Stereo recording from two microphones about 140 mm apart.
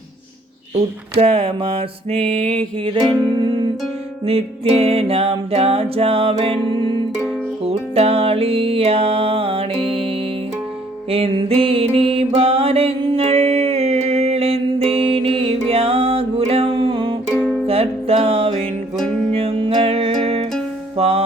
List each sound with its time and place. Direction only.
0.7 s music: 45° right (ahead or behind)
17.2 s music: 5° left (ahead or behind)
17.7 s music: 45° right (ahead or behind)
18.9 s music: 5° left (ahead or behind)
19.3 s music: 45° right (ahead or behind)